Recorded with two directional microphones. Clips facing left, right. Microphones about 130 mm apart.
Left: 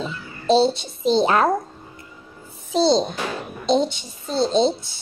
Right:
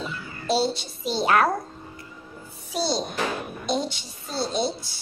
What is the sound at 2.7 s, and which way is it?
A woman's voice, 25° left (ahead or behind).